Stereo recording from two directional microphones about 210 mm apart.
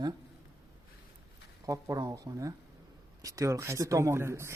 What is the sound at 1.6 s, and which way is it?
Speech, 15° right (ahead or behind).